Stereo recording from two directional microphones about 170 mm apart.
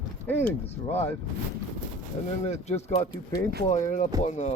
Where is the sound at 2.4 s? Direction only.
40° left (ahead or behind).